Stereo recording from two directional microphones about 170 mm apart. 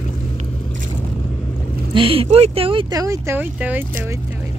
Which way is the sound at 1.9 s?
30° right (ahead or behind).